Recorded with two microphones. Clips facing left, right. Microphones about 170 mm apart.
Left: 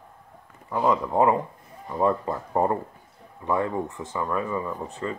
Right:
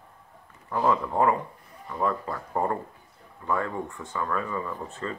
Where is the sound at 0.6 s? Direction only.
15° left (ahead or behind).